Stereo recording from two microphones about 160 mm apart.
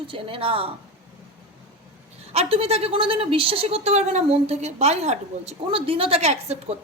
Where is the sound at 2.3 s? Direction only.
40° right (ahead or behind).